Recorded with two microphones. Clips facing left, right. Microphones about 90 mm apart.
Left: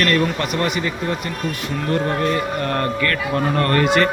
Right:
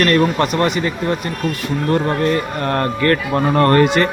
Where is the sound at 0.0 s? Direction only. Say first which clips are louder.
Right 4 dB; 35° right (ahead or behind).